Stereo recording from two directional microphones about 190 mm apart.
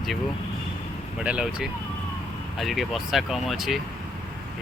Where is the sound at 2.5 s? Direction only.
Centre (ahead or behind).